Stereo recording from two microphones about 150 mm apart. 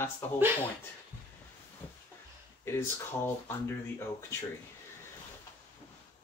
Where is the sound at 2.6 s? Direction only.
15° left (ahead or behind).